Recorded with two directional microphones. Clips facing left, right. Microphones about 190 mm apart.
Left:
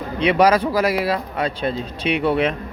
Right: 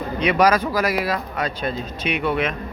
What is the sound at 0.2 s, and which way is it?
Speech, 30° left (ahead or behind).